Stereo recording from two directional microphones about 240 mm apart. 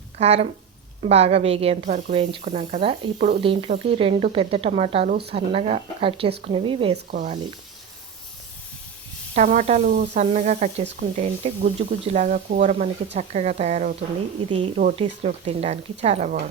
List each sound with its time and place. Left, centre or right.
0.2 s speech: right
7.1 s speech: right
9.3 s speech: right